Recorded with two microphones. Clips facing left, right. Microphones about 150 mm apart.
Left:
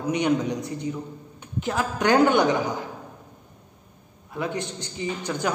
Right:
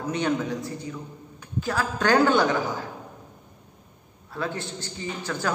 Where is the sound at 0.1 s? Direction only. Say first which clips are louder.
Left 3 dB; 15° left (ahead or behind).